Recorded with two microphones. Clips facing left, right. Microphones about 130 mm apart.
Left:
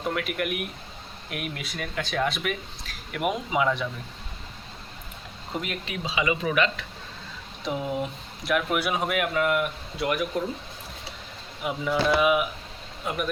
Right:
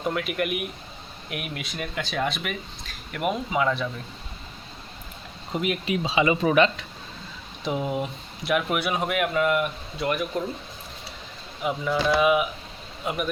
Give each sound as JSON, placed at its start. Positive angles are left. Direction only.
{"t": 0.0, "sound": "speech", "side_deg": 0}
{"t": 5.5, "sound": "speech", "side_deg": -5}
{"t": 5.9, "sound": "speech", "side_deg": -25}
{"t": 7.6, "sound": "speech", "side_deg": -5}
{"t": 11.6, "sound": "speech", "side_deg": 5}